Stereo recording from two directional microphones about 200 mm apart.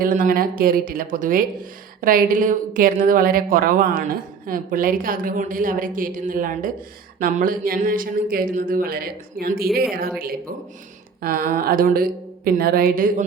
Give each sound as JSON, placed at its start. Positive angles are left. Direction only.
{"t": 0.0, "sound": "a woman's voice", "side_deg": -40}